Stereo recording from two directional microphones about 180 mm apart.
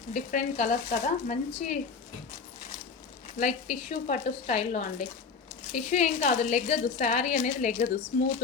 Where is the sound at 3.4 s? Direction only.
45° left (ahead or behind).